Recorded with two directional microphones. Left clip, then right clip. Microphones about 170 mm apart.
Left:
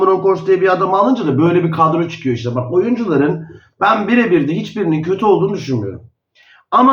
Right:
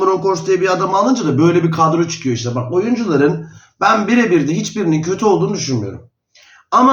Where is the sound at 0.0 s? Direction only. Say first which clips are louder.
Left 2 dB; 20° right (ahead or behind).